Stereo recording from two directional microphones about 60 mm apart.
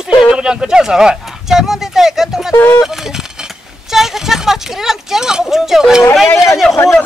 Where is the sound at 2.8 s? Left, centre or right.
Centre.